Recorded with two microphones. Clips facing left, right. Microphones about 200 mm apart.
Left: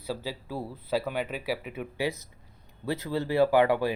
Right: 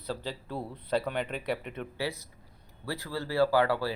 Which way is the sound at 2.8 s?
20° left (ahead or behind).